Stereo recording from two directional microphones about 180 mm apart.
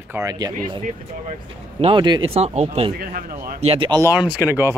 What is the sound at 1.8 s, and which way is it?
Speech, 25° right (ahead or behind).